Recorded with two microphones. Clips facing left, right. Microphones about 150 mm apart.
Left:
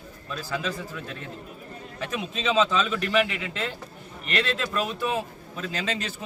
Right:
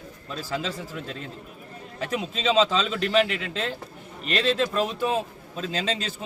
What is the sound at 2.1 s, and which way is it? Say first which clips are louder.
Speech: right 2 dB; 30° right (ahead or behind).